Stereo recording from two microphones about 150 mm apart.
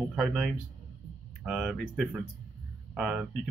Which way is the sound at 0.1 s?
5° right (ahead or behind).